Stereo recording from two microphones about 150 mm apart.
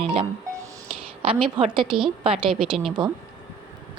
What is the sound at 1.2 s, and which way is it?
Speech, 35° right (ahead or behind).